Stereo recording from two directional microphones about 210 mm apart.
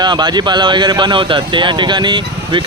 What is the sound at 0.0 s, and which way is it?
Speech, 20° right (ahead or behind).